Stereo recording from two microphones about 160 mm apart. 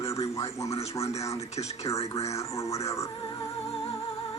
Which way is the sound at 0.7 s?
40° left (ahead or behind).